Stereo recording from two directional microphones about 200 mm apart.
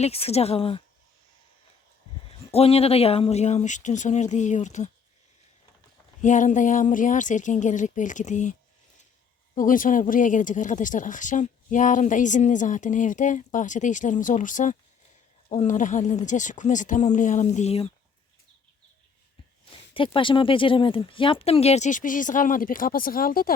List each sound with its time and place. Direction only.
0.0 s speech: 30° left (ahead or behind)
2.5 s speech: 30° left (ahead or behind)
6.2 s speech: 40° left (ahead or behind)
9.6 s speech: 40° left (ahead or behind)
19.9 s speech: 25° left (ahead or behind); by 23.5 s 45° left (ahead or behind)